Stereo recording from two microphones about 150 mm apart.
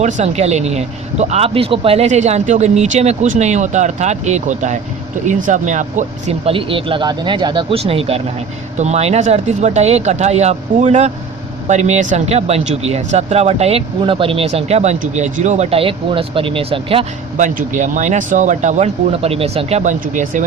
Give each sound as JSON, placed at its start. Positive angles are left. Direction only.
{"t": 0.0, "sound": "speech", "side_deg": -50}
{"t": 6.5, "sound": "speech", "side_deg": -35}
{"t": 17.3, "sound": "speech", "side_deg": -55}
{"t": 19.1, "sound": "speech", "side_deg": -40}
{"t": 19.8, "sound": "speech", "side_deg": -55}